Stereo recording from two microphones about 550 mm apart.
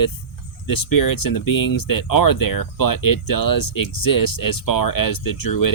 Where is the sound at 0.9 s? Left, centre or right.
Left.